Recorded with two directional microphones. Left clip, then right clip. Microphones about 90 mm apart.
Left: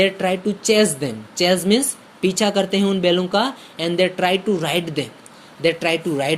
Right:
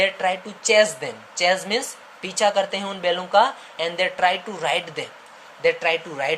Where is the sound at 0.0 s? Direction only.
45° left (ahead or behind).